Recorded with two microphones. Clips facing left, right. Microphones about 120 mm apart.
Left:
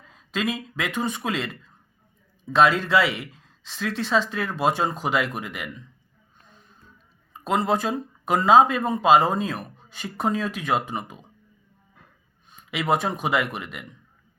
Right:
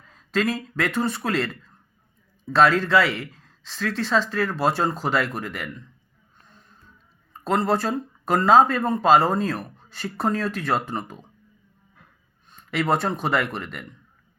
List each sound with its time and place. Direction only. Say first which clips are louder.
0.3 s speech: right 3 dB; 15° left (ahead or behind)
2.6 s speech: right 1 dB; 15° left (ahead or behind)
7.3 s speech: right 1 dB; 10° left (ahead or behind)
12.5 s a sound: right 1 dB; 5° left (ahead or behind)
13.2 s speech: right 1 dB; 5° left (ahead or behind)